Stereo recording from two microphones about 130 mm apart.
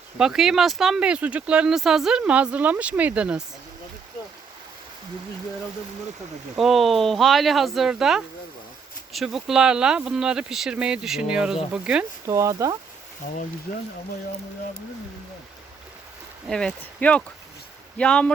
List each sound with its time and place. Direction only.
0.2 s speech: 5° right (ahead or behind)
6.6 s speech: centre (ahead or behind)
12.2 s speech: 25° right (ahead or behind)
13.2 s speech: 80° left
16.5 s speech: 5° left (ahead or behind)